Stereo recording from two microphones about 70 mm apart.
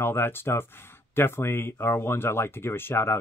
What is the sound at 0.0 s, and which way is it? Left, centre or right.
Speech, left.